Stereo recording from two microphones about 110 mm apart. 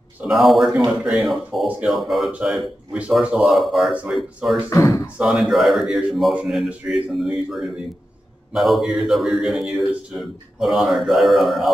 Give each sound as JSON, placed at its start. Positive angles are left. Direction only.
{"t": 0.3, "sound": "a man's voice", "side_deg": 0}
{"t": 4.6, "sound": "speech", "side_deg": 25}
{"t": 5.2, "sound": "a man's voice", "side_deg": 0}